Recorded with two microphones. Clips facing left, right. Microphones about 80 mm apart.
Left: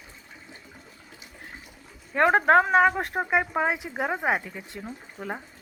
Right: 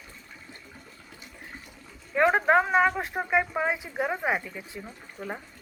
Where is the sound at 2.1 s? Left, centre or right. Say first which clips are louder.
Left 2 dB; left.